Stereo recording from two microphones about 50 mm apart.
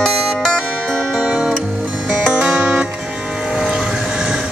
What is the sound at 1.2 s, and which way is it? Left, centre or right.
Music, right.